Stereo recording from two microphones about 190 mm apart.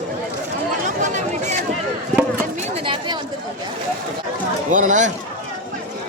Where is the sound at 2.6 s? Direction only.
30° right (ahead or behind).